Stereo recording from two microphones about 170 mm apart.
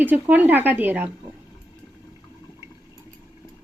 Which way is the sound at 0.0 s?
10° right (ahead or behind).